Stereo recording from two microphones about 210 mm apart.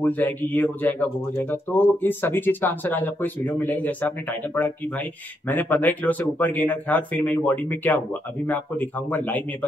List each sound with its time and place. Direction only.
0.0 s speech: 10° left (ahead or behind)